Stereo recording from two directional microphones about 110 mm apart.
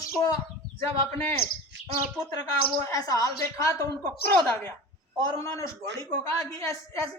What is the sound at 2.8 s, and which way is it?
Speech, 30° left (ahead or behind).